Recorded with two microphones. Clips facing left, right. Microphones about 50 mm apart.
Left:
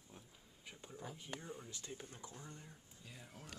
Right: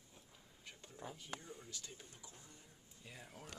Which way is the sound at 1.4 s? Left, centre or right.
Left.